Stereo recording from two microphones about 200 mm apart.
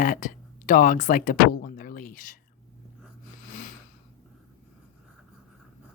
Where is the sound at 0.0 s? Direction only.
45° left (ahead or behind).